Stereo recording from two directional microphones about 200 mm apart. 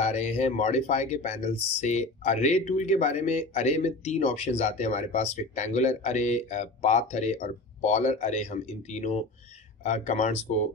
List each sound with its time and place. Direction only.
0.0 s speech: 35° left (ahead or behind)